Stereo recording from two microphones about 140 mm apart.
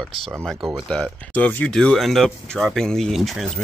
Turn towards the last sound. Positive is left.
turn(degrees=0)  # may be behind; listen again after turning